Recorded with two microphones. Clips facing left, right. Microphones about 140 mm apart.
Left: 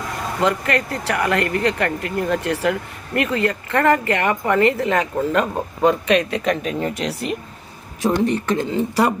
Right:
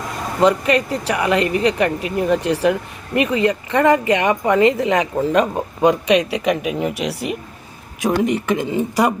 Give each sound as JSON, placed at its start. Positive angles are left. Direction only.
{"t": 0.3, "sound": "speech", "side_deg": -15}